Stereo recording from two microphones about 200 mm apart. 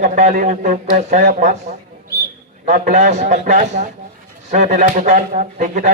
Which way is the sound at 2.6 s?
40° right (ahead or behind).